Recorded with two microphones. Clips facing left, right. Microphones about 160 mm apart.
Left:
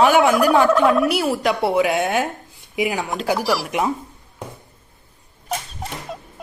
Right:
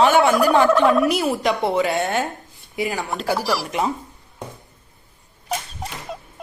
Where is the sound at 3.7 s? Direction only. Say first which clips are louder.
Left 1 dB; 10° left (ahead or behind).